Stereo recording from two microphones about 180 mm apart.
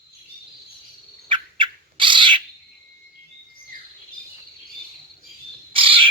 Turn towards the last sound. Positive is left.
turn(degrees=-30)  # may be behind; listen again after turning